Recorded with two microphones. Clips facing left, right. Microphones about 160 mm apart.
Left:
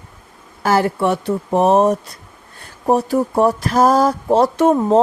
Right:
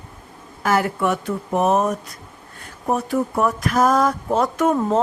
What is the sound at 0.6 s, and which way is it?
A woman's voice, 30° left (ahead or behind).